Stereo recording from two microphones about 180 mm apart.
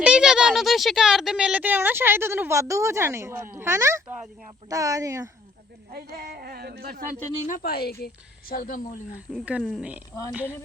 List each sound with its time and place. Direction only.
0.0 s speech: 5° right (ahead or behind)
5.9 s speech: 55° right (ahead or behind)
7.4 s a woman's voice: 50° left (ahead or behind)
9.3 s speech: 5° right (ahead or behind)